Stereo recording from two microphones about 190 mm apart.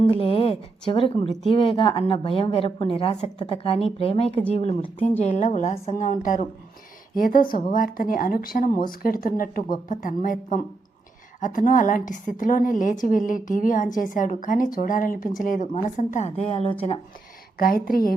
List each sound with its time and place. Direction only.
0.0 s a woman's voice: 30° left (ahead or behind)
17.6 s a woman's voice: 50° left (ahead or behind)